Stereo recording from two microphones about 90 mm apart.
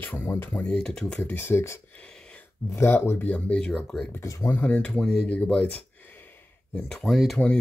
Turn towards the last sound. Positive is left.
turn(degrees=0)  # may be behind; listen again after turning